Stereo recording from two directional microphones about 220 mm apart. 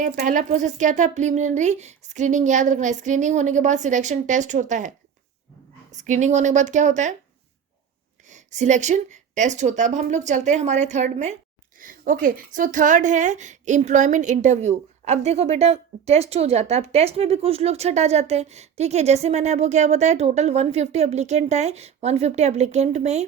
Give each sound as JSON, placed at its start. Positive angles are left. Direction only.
{"t": 0.0, "sound": "speech", "side_deg": -35}
{"t": 5.9, "sound": "speech", "side_deg": -35}
{"t": 8.3, "sound": "speech", "side_deg": -35}